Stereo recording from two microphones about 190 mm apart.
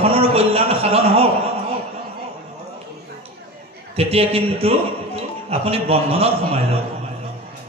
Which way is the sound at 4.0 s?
30° right (ahead or behind).